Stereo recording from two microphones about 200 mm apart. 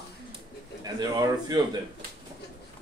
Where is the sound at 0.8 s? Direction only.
20° right (ahead or behind).